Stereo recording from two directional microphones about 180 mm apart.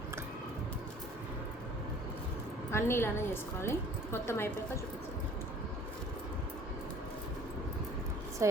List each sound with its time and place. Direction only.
2.7 s a woman's voice: 15° left (ahead or behind)
8.4 s a woman's voice: 15° right (ahead or behind)